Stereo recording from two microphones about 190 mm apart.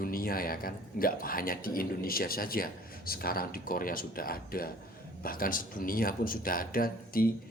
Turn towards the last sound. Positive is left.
turn(degrees=50)  # may be behind; listen again after turning